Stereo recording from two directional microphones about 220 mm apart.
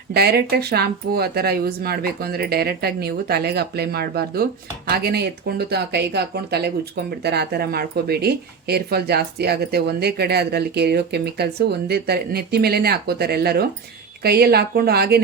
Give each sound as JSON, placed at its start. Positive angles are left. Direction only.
{"t": 0.1, "sound": "speech", "side_deg": -45}